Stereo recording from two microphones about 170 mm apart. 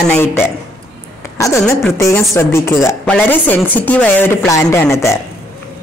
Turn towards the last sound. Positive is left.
turn(degrees=15)  # may be behind; listen again after turning